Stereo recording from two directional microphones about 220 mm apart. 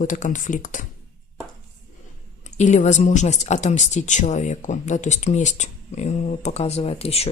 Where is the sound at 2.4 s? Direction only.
30° left (ahead or behind).